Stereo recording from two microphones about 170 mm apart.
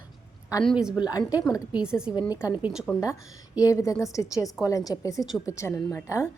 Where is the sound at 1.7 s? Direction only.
5° right (ahead or behind).